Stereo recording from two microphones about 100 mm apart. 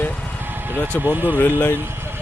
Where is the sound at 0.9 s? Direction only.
20° right (ahead or behind).